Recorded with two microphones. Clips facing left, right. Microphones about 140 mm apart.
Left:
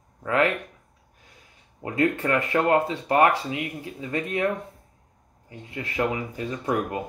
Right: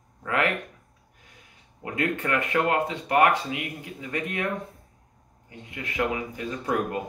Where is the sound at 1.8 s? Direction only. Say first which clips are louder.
Left 4 dB; 30° left (ahead or behind).